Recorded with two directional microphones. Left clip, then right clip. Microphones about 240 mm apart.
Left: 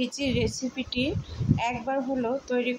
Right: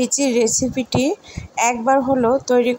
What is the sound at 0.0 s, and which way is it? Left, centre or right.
Speech, right.